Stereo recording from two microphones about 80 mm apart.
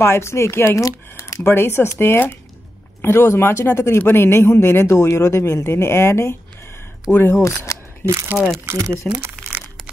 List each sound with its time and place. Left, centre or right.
0.0 s speech: left
7.1 s speech: centre
7.4 s speech: left
8.3 s speech: centre
8.6 s speech: right